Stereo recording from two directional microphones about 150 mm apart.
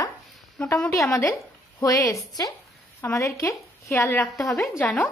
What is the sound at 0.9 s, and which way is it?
A woman's voice, 20° left (ahead or behind).